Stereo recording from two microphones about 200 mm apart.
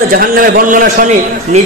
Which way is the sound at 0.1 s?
45° right (ahead or behind).